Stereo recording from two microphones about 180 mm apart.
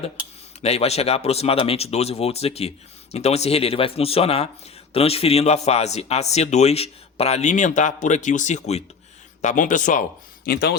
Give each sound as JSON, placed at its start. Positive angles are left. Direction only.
{"t": 0.6, "sound": "a man's voice", "side_deg": 35}